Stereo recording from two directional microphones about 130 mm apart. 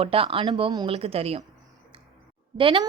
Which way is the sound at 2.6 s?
40° right (ahead or behind).